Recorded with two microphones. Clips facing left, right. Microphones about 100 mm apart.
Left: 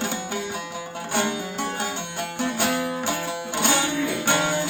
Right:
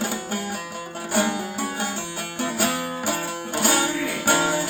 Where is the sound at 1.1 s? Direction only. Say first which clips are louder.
Right 2 dB; 5° right (ahead or behind).